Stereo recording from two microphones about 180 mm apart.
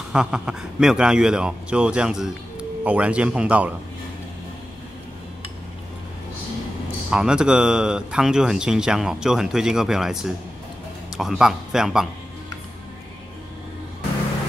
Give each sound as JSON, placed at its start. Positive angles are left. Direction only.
{"t": 0.1, "sound": "a man's voice", "side_deg": -5}
{"t": 7.1, "sound": "speech", "side_deg": -5}